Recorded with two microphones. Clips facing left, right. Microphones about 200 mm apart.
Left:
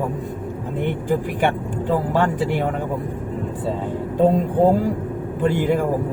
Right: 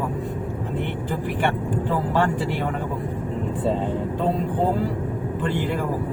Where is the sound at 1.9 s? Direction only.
45° left (ahead or behind).